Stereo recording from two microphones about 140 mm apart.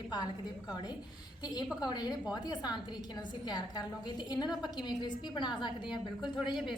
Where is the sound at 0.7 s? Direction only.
30° left (ahead or behind).